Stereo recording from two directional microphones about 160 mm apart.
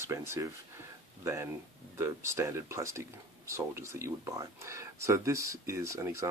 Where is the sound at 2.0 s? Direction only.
15° right (ahead or behind).